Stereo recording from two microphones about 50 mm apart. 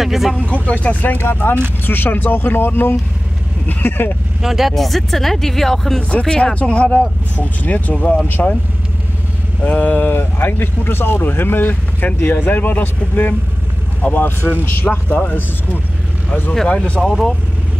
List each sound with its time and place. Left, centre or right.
0.0 s speech: centre
0.4 s speech: left
1.1 s speech: left
4.4 s speech: centre
9.6 s speech: left
17.0 s speech: centre